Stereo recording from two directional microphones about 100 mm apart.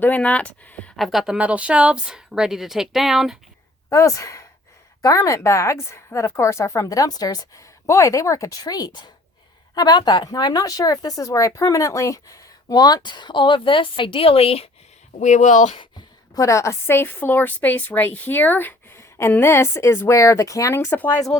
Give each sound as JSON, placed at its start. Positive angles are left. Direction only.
{"t": 0.0, "sound": "speech", "side_deg": 15}
{"t": 0.9, "sound": "speech", "side_deg": 0}
{"t": 3.8, "sound": "speech", "side_deg": 30}
{"t": 15.7, "sound": "speech", "side_deg": 55}
{"t": 16.3, "sound": "a woman's voice", "side_deg": 30}